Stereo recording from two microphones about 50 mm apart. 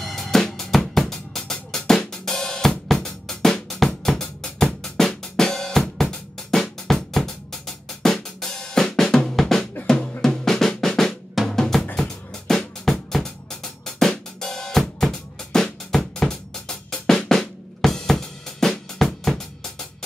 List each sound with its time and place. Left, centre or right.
0.0 s drum: centre
7.2 s drum kit: centre
9.8 s drum: centre
12.0 s music: centre
14.4 s drum kit: centre